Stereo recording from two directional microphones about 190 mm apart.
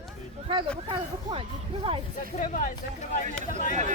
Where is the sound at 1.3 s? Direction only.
20° right (ahead or behind).